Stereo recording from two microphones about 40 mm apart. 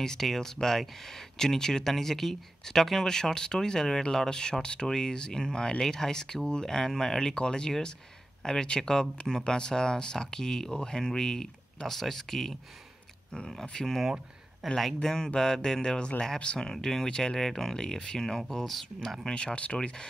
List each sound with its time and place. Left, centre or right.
0.0 s speech: centre
15.0 s speech: centre
19.3 s speech: left